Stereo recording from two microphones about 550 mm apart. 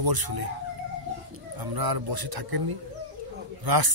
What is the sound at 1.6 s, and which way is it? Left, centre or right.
Speech, right.